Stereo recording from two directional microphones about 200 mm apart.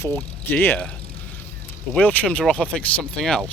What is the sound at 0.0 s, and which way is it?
Speech, 10° left (ahead or behind).